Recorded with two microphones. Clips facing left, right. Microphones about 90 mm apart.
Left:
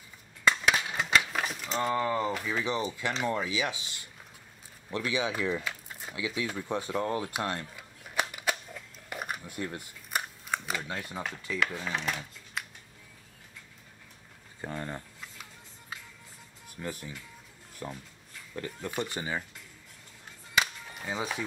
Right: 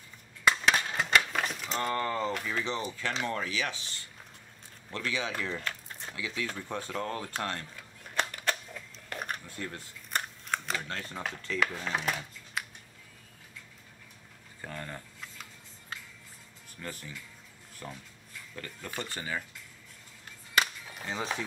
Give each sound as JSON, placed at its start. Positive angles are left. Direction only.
{"t": 0.7, "sound": "a sound", "side_deg": 5}
{"t": 3.3, "sound": "speech", "side_deg": 15}
{"t": 9.1, "sound": "camera", "side_deg": 10}
{"t": 11.6, "sound": "speech", "side_deg": 0}
{"t": 12.6, "sound": "a sound", "side_deg": -5}
{"t": 14.6, "sound": "speech", "side_deg": 20}
{"t": 16.8, "sound": "speech", "side_deg": 15}
{"t": 20.5, "sound": "music", "side_deg": 5}